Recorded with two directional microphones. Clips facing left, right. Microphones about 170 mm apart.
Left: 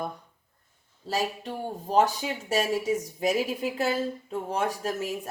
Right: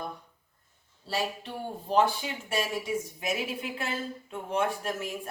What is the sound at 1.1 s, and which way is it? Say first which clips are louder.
A woman's voice: left 3 dB; 40° left (ahead or behind).